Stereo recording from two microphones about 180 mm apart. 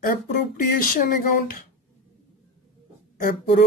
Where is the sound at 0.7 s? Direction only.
50° left (ahead or behind).